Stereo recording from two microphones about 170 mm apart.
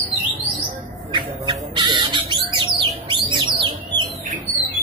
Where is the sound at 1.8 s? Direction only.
25° right (ahead or behind).